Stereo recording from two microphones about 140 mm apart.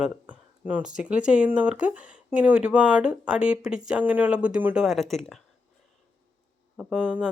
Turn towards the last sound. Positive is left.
turn(degrees=-10)  # may be behind; listen again after turning